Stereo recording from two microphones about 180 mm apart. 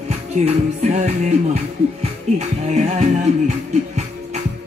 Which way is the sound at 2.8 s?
40° right (ahead or behind).